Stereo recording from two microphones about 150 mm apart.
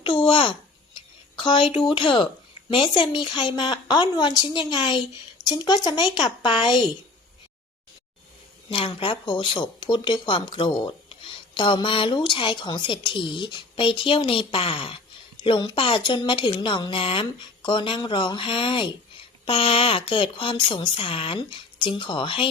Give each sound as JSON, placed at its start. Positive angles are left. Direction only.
{"t": 0.3, "sound": "a child's voice", "side_deg": 35}
{"t": 0.9, "sound": "a sound", "side_deg": 35}
{"t": 1.9, "sound": "speech", "side_deg": 35}
{"t": 8.7, "sound": "speech", "side_deg": 35}